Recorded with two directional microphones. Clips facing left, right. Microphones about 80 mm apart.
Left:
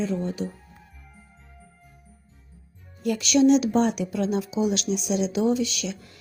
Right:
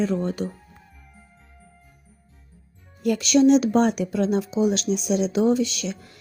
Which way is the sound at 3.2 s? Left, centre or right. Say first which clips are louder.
Right 2 dB; right.